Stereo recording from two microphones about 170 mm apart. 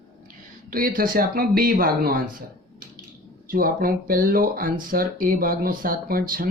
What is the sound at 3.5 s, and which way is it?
Speech, 55° right (ahead or behind).